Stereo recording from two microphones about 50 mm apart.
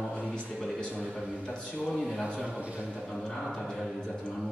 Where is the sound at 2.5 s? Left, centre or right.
Right.